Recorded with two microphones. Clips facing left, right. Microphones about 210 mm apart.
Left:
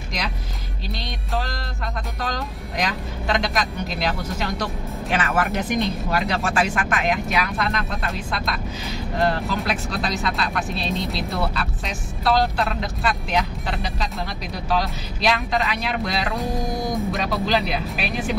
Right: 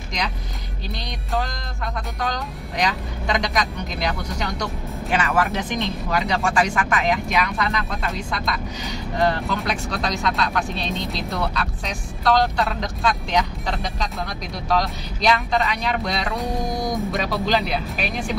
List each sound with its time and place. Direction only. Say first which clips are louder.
2.8 s speech: right 2 dB; centre (ahead or behind)